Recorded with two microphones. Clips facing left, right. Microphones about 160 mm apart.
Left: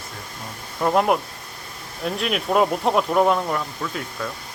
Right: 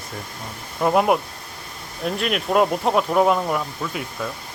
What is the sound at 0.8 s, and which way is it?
Speech, 5° right (ahead or behind).